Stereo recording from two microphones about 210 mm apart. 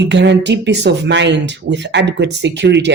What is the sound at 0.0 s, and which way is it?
Speech, 55° right (ahead or behind).